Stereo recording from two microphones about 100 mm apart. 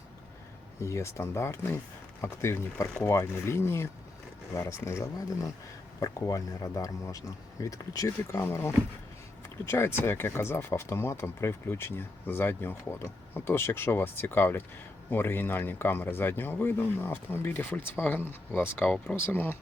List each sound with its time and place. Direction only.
0.8 s speech: 30° left (ahead or behind)